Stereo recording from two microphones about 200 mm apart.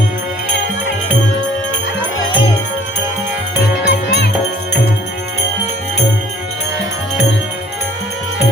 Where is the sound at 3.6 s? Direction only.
55° left (ahead or behind).